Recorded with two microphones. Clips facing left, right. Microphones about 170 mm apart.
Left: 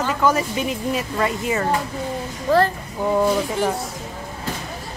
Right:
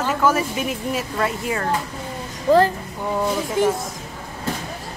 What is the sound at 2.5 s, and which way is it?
Speech, 15° right (ahead or behind).